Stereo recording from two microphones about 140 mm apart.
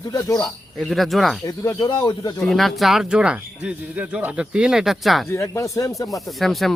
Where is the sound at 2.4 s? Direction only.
Centre (ahead or behind).